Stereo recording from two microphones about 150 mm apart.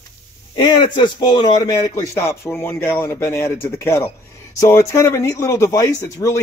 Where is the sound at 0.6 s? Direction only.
30° left (ahead or behind).